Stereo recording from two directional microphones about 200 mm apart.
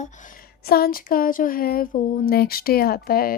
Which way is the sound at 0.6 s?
50° left (ahead or behind).